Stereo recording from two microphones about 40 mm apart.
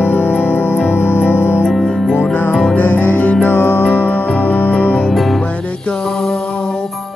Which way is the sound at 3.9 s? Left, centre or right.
Left.